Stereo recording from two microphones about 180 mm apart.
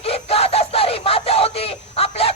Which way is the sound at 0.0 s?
35° left (ahead or behind).